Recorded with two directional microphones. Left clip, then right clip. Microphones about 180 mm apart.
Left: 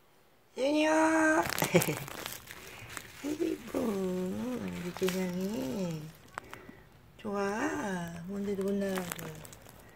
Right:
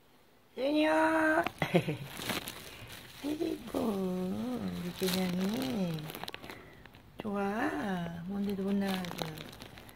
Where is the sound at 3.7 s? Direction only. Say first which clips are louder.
Left 1 dB; 5° left (ahead or behind).